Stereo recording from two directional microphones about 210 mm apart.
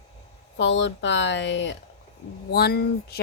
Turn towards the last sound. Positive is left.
turn(degrees=50)  # may be behind; listen again after turning